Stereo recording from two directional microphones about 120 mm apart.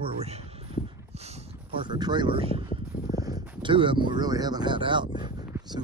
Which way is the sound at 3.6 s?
45° right (ahead or behind).